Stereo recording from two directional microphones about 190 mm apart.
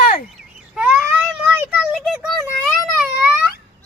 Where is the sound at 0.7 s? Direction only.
5° right (ahead or behind).